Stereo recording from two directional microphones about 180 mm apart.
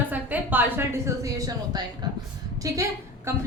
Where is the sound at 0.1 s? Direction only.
10° right (ahead or behind).